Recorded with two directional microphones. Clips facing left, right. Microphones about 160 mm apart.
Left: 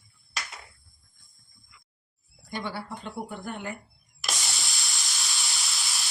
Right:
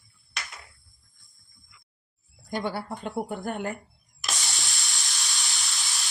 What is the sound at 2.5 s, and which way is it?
Speech, 50° right (ahead or behind).